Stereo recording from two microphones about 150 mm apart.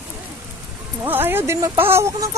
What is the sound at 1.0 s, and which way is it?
Music, 15° right (ahead or behind).